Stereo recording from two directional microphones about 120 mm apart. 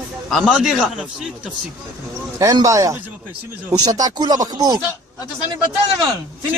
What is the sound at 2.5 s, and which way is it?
Speech, 30° right (ahead or behind).